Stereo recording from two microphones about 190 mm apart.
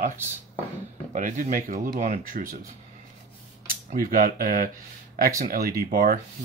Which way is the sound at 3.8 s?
50° right (ahead or behind).